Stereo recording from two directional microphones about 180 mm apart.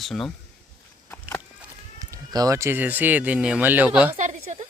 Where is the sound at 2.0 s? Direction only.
20° right (ahead or behind).